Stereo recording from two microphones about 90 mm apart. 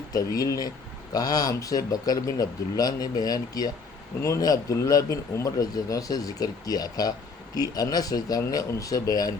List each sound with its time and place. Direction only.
0.1 s speech: 40° left (ahead or behind)